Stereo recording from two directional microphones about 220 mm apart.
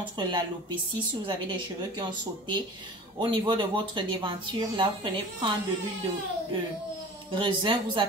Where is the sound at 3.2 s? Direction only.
20° right (ahead or behind).